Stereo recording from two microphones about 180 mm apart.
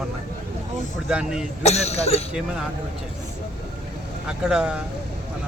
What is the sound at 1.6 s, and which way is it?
Speech, 35° left (ahead or behind).